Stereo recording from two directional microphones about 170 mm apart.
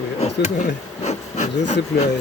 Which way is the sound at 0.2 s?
40° left (ahead or behind).